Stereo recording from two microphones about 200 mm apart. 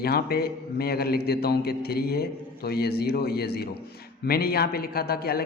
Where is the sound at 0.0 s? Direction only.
50° left (ahead or behind).